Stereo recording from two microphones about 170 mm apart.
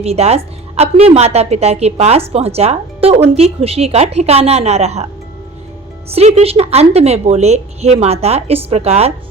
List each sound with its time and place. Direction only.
0.0 s a woman's voice: 35° right (ahead or behind)
6.1 s a woman's voice: 35° right (ahead or behind)